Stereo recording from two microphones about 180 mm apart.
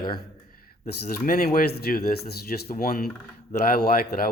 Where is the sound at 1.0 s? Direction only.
55° left (ahead or behind).